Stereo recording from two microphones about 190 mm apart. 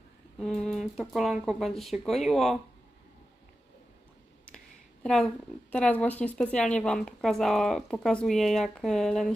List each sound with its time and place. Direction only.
0.3 s a woman's voice: centre (ahead or behind)
5.0 s a woman's voice: centre (ahead or behind)